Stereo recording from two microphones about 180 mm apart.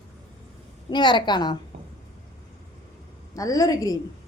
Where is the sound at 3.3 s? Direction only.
20° left (ahead or behind).